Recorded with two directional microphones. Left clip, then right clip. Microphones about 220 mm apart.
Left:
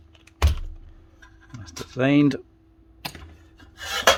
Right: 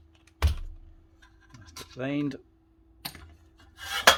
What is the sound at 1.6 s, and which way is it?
Speech, 40° left (ahead or behind).